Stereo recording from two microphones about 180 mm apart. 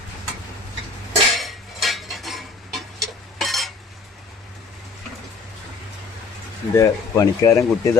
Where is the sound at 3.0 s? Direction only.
Centre (ahead or behind).